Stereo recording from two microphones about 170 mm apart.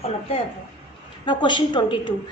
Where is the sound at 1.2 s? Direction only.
25° left (ahead or behind).